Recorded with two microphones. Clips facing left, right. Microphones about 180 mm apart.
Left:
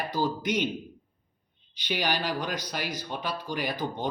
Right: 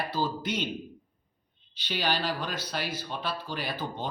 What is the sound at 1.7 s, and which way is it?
Speech, 15° left (ahead or behind).